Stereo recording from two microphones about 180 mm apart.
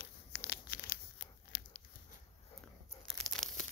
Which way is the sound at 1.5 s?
65° left (ahead or behind).